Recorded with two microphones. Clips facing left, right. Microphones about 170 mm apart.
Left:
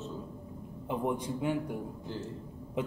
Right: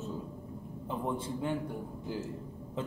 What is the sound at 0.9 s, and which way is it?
Speech, 15° left (ahead or behind).